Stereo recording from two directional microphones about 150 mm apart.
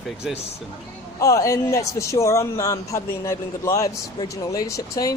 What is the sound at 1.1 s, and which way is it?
A man's voice, 20° left (ahead or behind).